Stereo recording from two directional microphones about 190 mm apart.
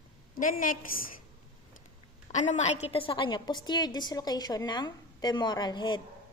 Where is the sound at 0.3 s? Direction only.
45° left (ahead or behind).